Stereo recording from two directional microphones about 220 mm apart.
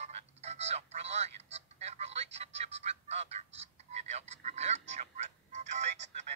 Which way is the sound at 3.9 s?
30° right (ahead or behind).